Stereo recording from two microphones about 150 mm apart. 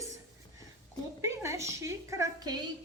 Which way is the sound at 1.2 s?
20° right (ahead or behind).